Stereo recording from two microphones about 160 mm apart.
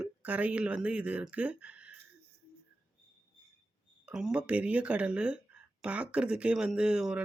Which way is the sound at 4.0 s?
5° right (ahead or behind).